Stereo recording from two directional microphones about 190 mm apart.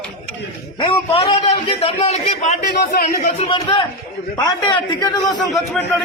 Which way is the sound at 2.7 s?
50° left (ahead or behind).